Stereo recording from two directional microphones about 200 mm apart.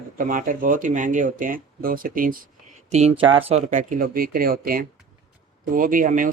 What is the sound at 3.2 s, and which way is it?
Speech, 25° right (ahead or behind).